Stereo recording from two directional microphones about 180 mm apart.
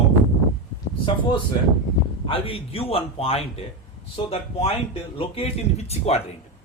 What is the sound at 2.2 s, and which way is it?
Speech, 30° left (ahead or behind).